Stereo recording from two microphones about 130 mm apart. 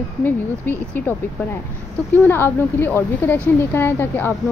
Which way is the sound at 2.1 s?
15° left (ahead or behind).